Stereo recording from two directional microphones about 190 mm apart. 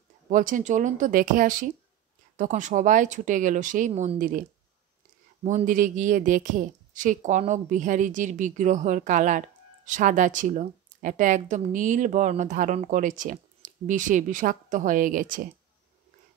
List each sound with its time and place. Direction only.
0.3 s a woman's voice: 45° right (ahead or behind)